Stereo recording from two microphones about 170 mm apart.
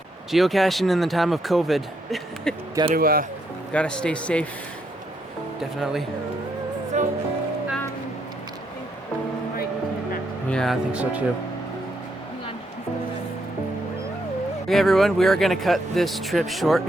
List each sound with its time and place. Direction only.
0.3 s speech: centre (ahead or behind)
2.9 s speech: 60° right (ahead or behind)
3.7 s speech: 5° left (ahead or behind)
5.5 s speech: centre (ahead or behind)
6.9 s music: 45° right (ahead or behind)
10.5 s speech: centre (ahead or behind)
14.7 s speech: centre (ahead or behind)